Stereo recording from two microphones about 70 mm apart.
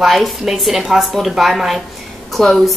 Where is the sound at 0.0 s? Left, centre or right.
Centre.